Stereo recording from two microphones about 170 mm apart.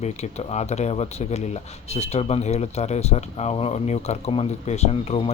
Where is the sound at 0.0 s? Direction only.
40° left (ahead or behind).